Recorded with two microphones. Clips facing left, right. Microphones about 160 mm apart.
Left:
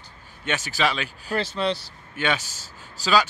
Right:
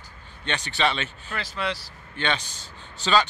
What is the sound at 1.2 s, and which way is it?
Speech, 35° left (ahead or behind).